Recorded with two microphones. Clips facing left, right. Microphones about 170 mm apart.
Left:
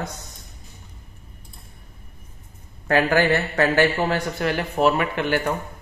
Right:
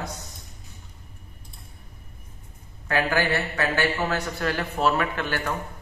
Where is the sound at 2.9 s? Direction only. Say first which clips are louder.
Left 5 dB; 40° left (ahead or behind).